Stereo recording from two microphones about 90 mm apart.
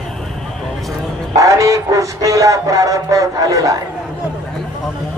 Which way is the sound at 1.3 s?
35° right (ahead or behind).